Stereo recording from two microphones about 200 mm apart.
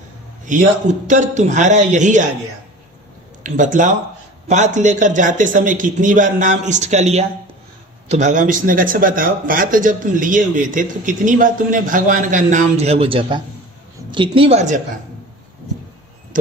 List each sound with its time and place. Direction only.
0.5 s speech: 40° right (ahead or behind)
3.4 s speech: 40° right (ahead or behind)